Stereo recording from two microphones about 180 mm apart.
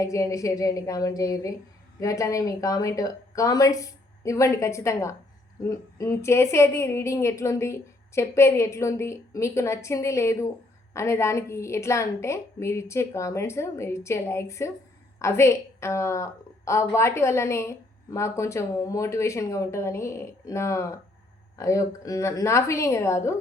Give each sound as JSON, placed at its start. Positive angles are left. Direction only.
{"t": 0.0, "sound": "a woman's voice", "side_deg": 15}